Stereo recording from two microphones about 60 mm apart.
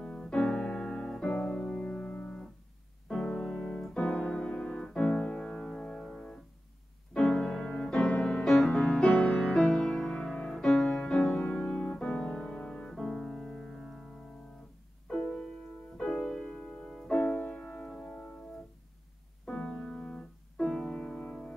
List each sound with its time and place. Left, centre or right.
0.2 s keyboard: centre
3.1 s music: centre
3.8 s piano: centre
7.2 s music: centre
9.1 s music: left
9.4 s music: centre
15.2 s music: centre
17.2 s music: left
19.5 s music: centre
21.2 s music: left